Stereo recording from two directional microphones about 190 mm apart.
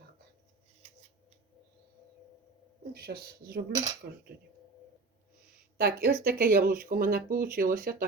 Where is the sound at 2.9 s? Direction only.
55° right (ahead or behind).